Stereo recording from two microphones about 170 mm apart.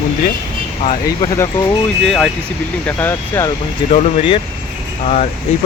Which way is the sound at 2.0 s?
5° left (ahead or behind).